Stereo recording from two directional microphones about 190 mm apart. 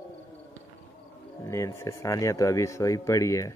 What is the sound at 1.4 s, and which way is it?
Speech, 15° left (ahead or behind).